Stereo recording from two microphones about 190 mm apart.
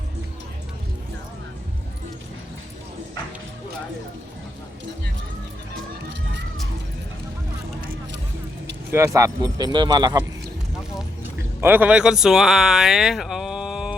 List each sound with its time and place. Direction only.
8.9 s speech: 15° right (ahead or behind)
11.2 s speech: 10° right (ahead or behind)